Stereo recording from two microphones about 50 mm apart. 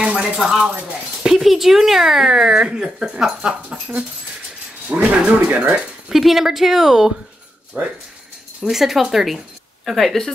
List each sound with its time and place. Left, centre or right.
0.2 s speech: centre
3.3 s speech: right
4.8 s speech: right
5.8 s speech: centre
7.7 s speech: right
8.6 s a woman's voice: centre